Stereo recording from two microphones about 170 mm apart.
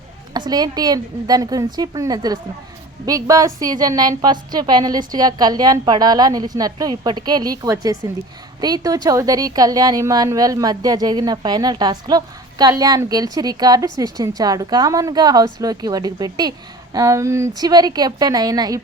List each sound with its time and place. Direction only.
0.3 s a woman's voice: 25° right (ahead or behind)